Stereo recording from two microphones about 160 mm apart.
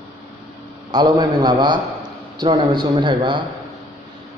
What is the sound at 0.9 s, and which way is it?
A man's voice, 25° right (ahead or behind).